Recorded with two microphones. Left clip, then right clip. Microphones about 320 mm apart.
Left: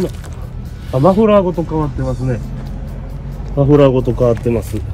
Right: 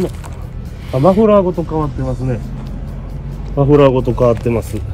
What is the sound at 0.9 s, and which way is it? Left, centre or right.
Speech, centre.